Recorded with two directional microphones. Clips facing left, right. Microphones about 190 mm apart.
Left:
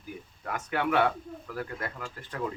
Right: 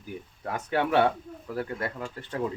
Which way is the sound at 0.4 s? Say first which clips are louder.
Right 2 dB; 30° right (ahead or behind).